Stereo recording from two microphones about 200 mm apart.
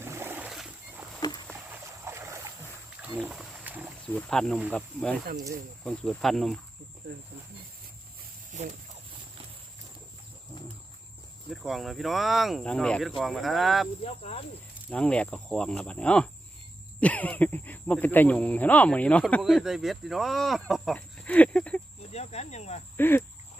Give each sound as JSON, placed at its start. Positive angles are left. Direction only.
{"t": 0.0, "sound": "wild animals", "side_deg": -10}
{"t": 1.7, "sound": "boat", "side_deg": -15}
{"t": 3.0, "sound": "wild animals", "side_deg": -5}
{"t": 4.1, "sound": "speech", "side_deg": 5}
{"t": 8.5, "sound": "speech", "side_deg": -35}
{"t": 11.5, "sound": "speech", "side_deg": 0}
{"t": 14.0, "sound": "speech", "side_deg": 30}
{"t": 14.8, "sound": "speech", "side_deg": 5}
{"t": 22.1, "sound": "cricket", "side_deg": 35}
{"t": 23.0, "sound": "speech", "side_deg": 10}